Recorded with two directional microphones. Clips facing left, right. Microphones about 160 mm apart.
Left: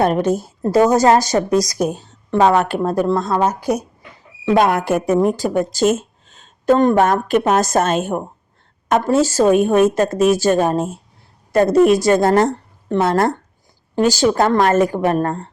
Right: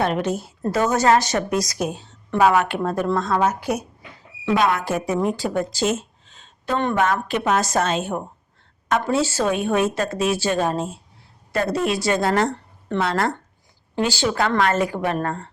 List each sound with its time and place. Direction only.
0.0 s a woman's voice: 45° left (ahead or behind)
4.5 s speech: 50° left (ahead or behind)